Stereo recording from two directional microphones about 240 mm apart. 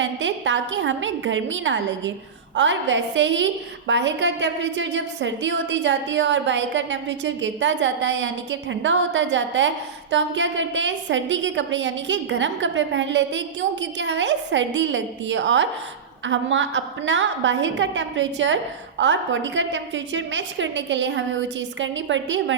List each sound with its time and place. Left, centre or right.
0.0 s a woman's voice: right